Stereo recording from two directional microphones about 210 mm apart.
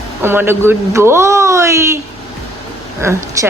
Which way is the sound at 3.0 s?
15° right (ahead or behind).